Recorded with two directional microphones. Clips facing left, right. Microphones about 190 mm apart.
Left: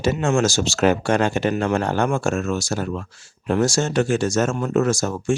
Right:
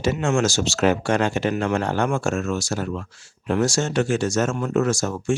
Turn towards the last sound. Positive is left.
turn(degrees=40)  # may be behind; listen again after turning